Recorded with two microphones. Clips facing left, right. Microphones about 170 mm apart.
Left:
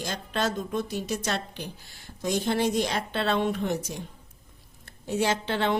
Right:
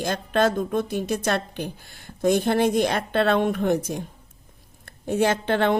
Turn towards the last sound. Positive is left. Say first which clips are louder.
# right 5 dB
turn(degrees=-55)  # may be behind; listen again after turning